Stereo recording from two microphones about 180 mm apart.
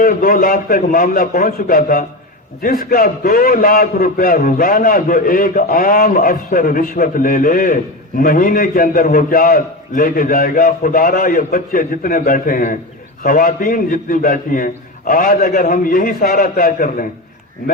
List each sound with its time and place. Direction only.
0.0 s a man's voice: 50° left (ahead or behind)